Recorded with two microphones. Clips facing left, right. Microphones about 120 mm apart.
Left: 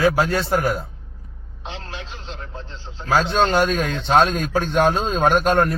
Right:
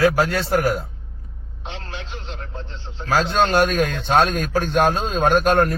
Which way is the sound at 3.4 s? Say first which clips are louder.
Right 1 dB; 20° left (ahead or behind).